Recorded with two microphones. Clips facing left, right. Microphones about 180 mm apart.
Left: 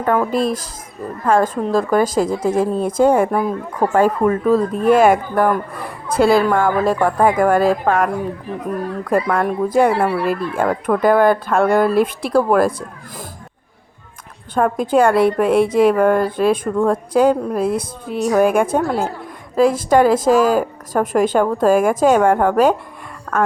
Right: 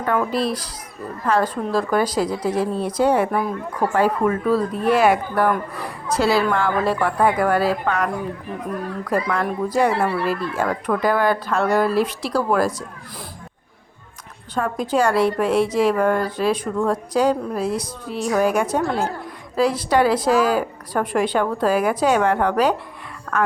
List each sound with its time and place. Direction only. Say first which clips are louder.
0.0 s a woman's voice: left 4 dB; 45° left (ahead or behind)
9.3 s a woman's voice: left 5 dB; 50° left (ahead or behind)
14.5 s a woman's voice: left 6 dB; 55° left (ahead or behind)